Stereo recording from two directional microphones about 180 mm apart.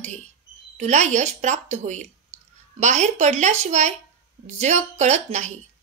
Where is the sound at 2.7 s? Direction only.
40° right (ahead or behind).